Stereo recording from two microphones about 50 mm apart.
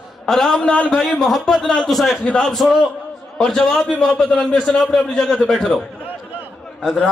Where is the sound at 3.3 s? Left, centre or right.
Centre.